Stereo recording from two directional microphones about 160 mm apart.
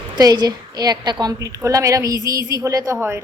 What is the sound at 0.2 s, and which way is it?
A woman's voice, 25° right (ahead or behind).